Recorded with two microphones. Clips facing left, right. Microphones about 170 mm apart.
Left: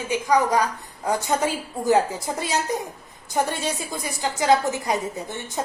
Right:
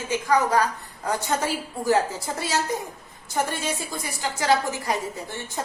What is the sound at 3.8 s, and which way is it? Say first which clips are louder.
A woman's voice: left 2 dB; 20° left (ahead or behind).